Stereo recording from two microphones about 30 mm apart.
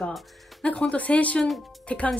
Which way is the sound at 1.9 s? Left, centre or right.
Left.